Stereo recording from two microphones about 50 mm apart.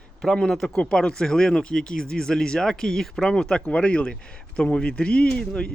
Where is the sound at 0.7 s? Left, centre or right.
Centre.